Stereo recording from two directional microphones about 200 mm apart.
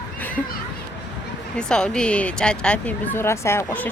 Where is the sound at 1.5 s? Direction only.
5° left (ahead or behind).